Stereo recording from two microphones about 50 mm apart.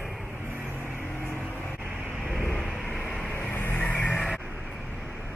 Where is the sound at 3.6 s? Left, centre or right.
Left.